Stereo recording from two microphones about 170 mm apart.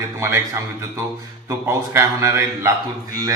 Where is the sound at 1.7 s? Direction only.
15° right (ahead or behind).